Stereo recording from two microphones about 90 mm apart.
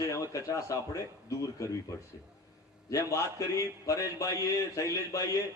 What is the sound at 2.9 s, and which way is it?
A man's voice, 35° left (ahead or behind).